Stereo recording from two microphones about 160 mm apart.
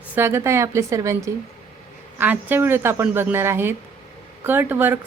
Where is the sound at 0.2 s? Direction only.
15° right (ahead or behind).